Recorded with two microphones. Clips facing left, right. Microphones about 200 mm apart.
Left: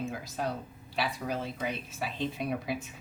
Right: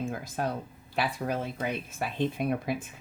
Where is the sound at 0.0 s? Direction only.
50° right (ahead or behind).